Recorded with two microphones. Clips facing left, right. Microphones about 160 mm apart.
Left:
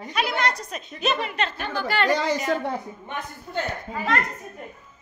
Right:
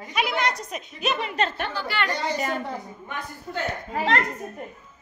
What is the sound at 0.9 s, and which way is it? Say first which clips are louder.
Speech: left 2 dB; 10° right (ahead or behind).